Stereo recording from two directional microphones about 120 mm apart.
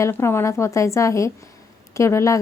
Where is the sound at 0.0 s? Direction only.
20° left (ahead or behind).